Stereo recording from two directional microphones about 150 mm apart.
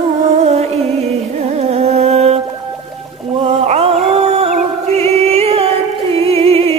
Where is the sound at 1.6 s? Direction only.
45° right (ahead or behind).